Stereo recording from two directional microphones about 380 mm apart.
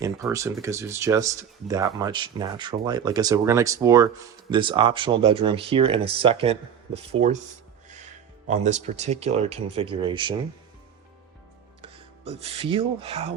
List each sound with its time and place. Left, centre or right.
0.0 s speech: centre
8.4 s speech: centre
11.8 s speech: centre